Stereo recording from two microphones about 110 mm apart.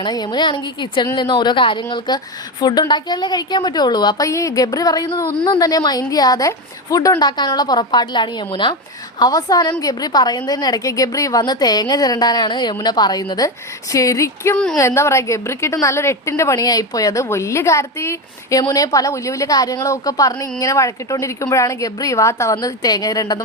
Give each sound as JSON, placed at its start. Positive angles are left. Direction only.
{"t": 0.0, "sound": "a woman's voice", "side_deg": 40}
{"t": 4.3, "sound": "a woman's voice", "side_deg": 30}
{"t": 9.1, "sound": "a woman's voice", "side_deg": 35}
{"t": 14.5, "sound": "speech", "side_deg": 5}
{"t": 14.8, "sound": "a woman's voice", "side_deg": 25}